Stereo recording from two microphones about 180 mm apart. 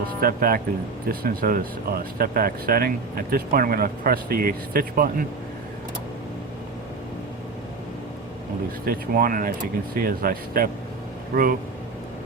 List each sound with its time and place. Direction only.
0.2 s speech: 55° right (ahead or behind)
8.8 s speech: 55° right (ahead or behind)